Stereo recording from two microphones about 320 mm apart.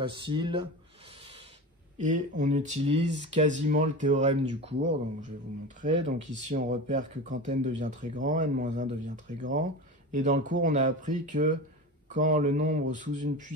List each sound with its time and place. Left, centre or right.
0.0 s speech: centre
2.0 s speech: right
5.8 s speech: right